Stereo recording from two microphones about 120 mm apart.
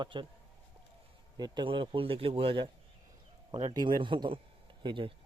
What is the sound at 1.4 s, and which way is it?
A man's voice, 35° right (ahead or behind).